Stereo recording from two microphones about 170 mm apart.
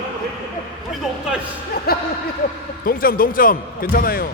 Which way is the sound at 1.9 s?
65° left (ahead or behind).